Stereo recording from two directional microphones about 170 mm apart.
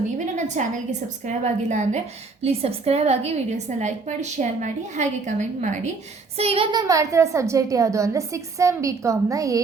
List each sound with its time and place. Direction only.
0.3 s a woman's voice: 45° right (ahead or behind); by 9.6 s 20° right (ahead or behind)